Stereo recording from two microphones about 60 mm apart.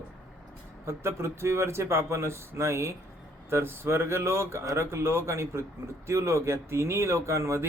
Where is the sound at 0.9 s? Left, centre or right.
Right.